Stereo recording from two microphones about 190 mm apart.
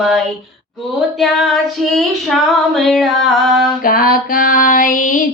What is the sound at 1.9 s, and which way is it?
Female singing, centre (ahead or behind).